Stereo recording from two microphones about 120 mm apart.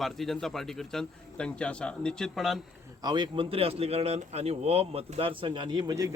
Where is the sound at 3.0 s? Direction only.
40° right (ahead or behind).